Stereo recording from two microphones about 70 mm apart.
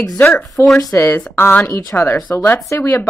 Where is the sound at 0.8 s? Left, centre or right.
Left.